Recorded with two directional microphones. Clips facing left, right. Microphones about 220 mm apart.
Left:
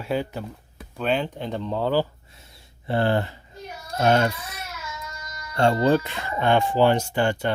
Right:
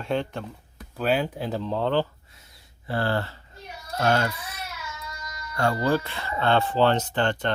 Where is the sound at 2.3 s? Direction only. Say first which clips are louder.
Left 4 dB; 25° left (ahead or behind).